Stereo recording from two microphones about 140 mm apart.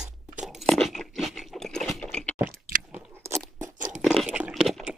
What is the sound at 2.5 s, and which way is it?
Chewing, 90° right.